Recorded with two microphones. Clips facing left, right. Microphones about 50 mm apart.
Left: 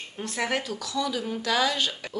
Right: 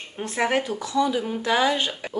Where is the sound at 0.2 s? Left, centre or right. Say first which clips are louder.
Right 5 dB; right.